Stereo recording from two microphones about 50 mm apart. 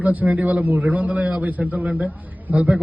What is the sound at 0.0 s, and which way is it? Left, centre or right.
A man's voice, right.